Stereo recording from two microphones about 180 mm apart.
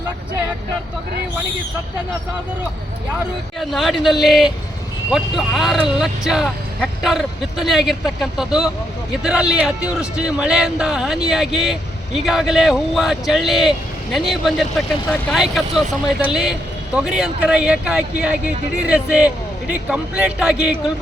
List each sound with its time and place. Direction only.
3.6 s speech: centre (ahead or behind)